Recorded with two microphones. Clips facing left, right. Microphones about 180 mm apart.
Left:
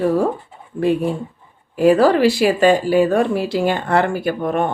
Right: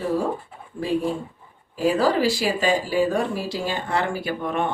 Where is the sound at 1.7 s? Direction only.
60° left (ahead or behind).